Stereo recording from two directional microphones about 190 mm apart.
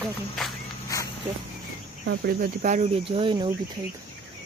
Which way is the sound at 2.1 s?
50° right (ahead or behind).